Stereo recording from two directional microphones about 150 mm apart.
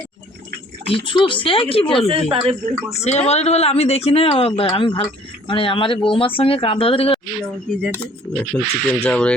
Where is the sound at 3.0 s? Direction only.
45° left (ahead or behind).